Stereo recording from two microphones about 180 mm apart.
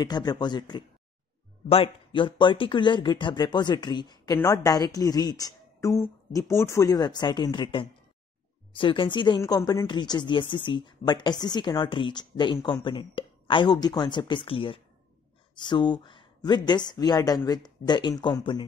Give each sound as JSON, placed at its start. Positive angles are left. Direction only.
{"t": 0.0, "sound": "speech", "side_deg": 25}